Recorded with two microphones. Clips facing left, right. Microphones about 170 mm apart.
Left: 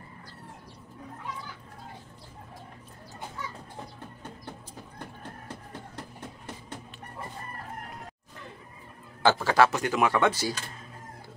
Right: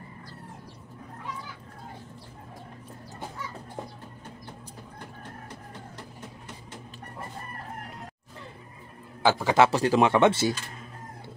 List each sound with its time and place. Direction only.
9.2 s a man's voice: 20° right (ahead or behind)
9.7 s speech: 30° right (ahead or behind)